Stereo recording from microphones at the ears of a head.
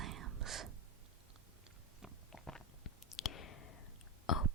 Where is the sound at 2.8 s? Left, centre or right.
Left.